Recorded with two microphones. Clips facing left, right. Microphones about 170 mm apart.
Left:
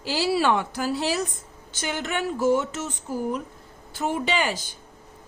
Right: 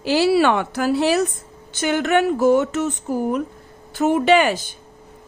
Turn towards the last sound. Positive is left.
turn(degrees=-60)  # may be behind; listen again after turning